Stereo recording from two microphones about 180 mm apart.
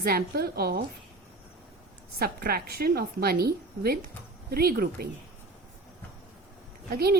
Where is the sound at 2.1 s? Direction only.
55° right (ahead or behind).